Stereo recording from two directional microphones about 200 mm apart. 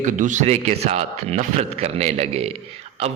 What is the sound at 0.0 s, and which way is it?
A man's voice, 40° right (ahead or behind).